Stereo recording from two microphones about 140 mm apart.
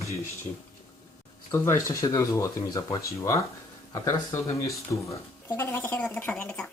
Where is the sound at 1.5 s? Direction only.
20° left (ahead or behind).